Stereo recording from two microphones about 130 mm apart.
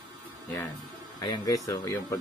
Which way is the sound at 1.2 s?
30° left (ahead or behind).